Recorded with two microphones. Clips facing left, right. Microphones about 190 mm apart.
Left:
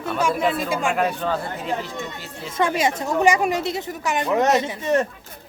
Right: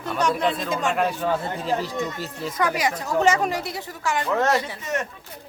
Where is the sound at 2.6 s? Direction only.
25° left (ahead or behind).